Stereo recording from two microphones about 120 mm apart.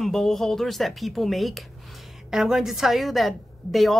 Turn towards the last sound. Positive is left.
turn(degrees=0)  # may be behind; listen again after turning